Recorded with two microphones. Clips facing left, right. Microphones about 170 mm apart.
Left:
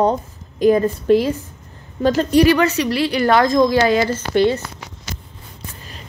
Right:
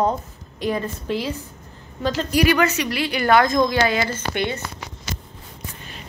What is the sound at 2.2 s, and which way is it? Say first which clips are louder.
A woman's voice: left 3 dB; 30° left (ahead or behind).